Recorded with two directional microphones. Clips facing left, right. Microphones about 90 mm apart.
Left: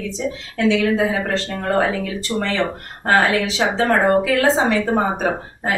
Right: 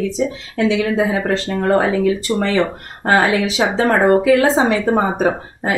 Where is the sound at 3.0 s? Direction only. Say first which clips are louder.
Right 2 dB; 15° right (ahead or behind).